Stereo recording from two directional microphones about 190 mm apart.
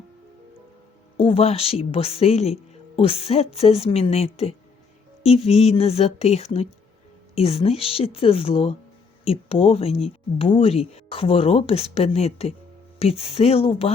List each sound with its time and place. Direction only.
1.1 s speech: 30° left (ahead or behind)